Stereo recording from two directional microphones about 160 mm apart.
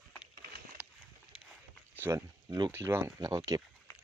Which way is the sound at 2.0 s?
15° right (ahead or behind).